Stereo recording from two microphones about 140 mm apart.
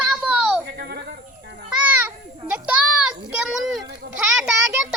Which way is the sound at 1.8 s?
10° right (ahead or behind).